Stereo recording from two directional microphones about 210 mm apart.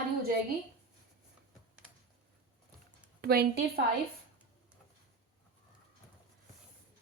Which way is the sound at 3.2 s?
45° right (ahead or behind).